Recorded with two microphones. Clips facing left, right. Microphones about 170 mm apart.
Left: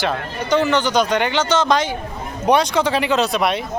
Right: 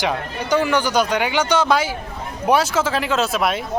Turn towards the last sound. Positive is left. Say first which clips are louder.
# left 2 dB
turn(degrees=0)  # may be behind; listen again after turning